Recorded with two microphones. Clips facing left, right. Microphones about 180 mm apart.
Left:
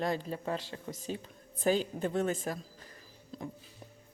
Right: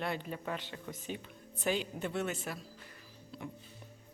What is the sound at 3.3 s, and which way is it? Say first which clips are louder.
Music: left 3 dB; 40° left (ahead or behind).